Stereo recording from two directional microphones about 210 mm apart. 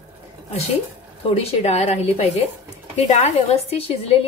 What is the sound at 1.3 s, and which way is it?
A woman's voice, 30° left (ahead or behind).